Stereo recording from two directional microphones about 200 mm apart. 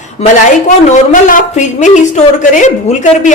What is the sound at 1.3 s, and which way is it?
A woman's voice, 35° left (ahead or behind).